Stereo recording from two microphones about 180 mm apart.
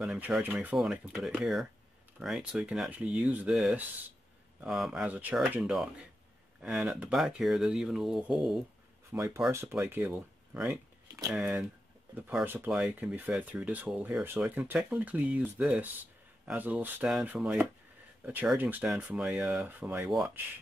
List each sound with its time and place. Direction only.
0.0 s speech: 5° right (ahead or behind)
9.1 s speech: 15° right (ahead or behind)